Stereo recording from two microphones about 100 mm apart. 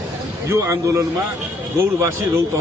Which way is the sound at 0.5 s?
30° right (ahead or behind).